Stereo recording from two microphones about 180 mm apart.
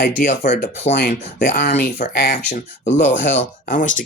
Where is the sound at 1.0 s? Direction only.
55° left (ahead or behind).